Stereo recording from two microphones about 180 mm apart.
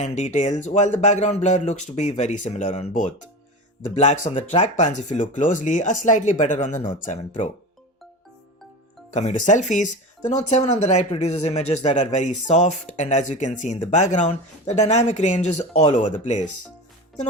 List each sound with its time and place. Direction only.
0.0 s speech: 40° left (ahead or behind)
9.1 s speech: 40° left (ahead or behind)